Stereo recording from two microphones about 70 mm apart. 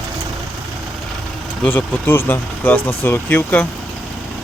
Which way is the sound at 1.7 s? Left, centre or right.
Left.